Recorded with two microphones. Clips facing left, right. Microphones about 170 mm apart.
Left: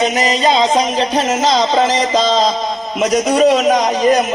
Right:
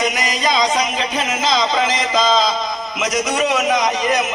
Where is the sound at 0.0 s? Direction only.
35° left (ahead or behind).